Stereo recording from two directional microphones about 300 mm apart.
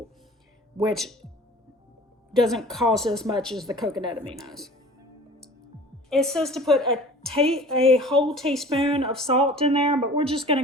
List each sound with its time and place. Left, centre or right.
0.9 s a woman's voice: centre
2.4 s a woman's voice: centre
6.1 s a woman's voice: centre
8.7 s speech: centre